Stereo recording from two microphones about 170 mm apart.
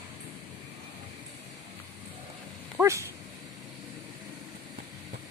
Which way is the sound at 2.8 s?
15° right (ahead or behind).